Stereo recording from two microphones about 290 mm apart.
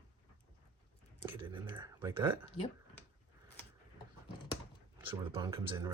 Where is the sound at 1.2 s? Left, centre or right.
Centre.